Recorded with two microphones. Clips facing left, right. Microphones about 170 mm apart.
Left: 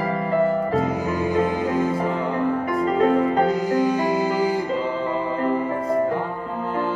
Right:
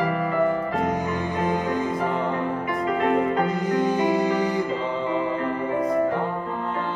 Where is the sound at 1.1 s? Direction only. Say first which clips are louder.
Left 4 dB; 5° left (ahead or behind).